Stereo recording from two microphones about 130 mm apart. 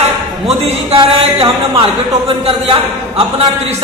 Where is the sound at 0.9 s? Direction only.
45° right (ahead or behind).